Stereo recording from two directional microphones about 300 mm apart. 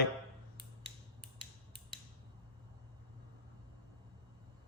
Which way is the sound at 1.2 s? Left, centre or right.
Centre.